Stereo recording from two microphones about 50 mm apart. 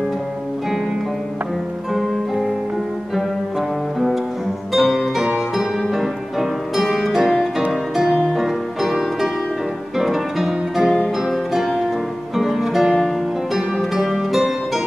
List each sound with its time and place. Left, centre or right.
2.0 s music: centre
4.7 s music: centre
9.9 s guitar: centre
11.2 s music: centre